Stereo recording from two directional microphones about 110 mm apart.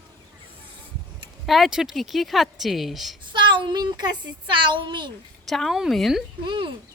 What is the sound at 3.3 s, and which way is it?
Speech, 45° right (ahead or behind).